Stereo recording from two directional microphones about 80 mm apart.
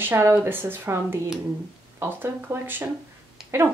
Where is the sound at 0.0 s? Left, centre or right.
Right.